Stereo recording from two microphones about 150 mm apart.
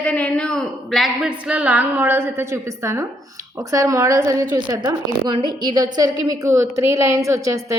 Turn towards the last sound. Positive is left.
turn(degrees=-20)  # may be behind; listen again after turning